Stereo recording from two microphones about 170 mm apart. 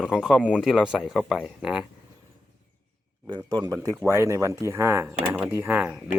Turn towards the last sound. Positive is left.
turn(degrees=-10)  # may be behind; listen again after turning